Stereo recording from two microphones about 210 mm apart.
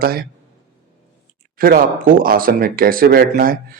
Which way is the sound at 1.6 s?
45° right (ahead or behind).